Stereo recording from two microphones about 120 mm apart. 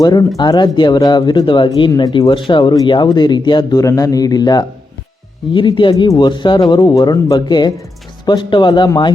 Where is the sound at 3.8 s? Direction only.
25° left (ahead or behind).